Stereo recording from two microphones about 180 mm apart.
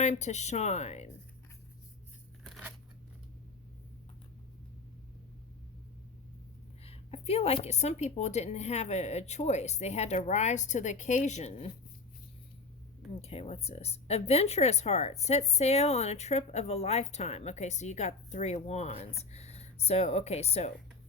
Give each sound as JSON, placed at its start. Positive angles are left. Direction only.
{"t": 0.0, "sound": "speech", "side_deg": 40}
{"t": 2.4, "sound": "scissors", "side_deg": 0}
{"t": 6.8, "sound": "speech", "side_deg": 35}
{"t": 13.2, "sound": "speech", "side_deg": 35}